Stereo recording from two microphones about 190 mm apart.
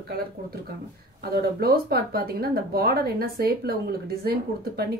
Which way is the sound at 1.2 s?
55° right (ahead or behind).